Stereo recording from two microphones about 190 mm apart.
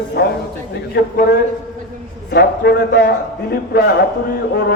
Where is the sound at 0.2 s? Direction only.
55° left (ahead or behind).